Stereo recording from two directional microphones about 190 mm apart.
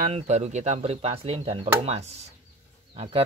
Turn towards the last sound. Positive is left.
turn(degrees=-30)  # may be behind; listen again after turning